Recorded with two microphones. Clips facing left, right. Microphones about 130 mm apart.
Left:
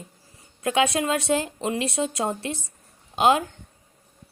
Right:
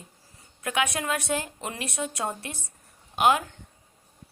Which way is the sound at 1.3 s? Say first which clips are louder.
Left 6 dB; 20° left (ahead or behind).